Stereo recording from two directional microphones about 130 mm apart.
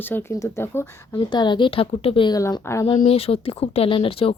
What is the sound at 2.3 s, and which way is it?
Speech, 25° left (ahead or behind).